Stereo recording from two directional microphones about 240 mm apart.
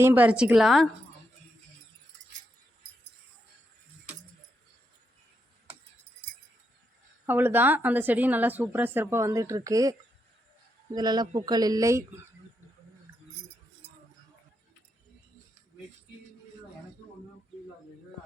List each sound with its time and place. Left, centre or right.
0.0 s a woman's voice: centre
7.3 s a woman's voice: centre
10.9 s a woman's voice: centre